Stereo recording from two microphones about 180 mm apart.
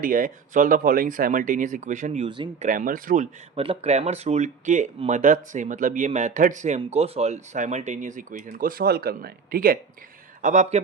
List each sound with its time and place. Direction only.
0.0 s speech: 50° right (ahead or behind)
2.2 s speech: 25° right (ahead or behind)
2.6 s speech: 50° right (ahead or behind)
3.5 s speech: 30° right (ahead or behind); by 9.7 s 55° right (ahead or behind)
10.4 s speech: 40° right (ahead or behind)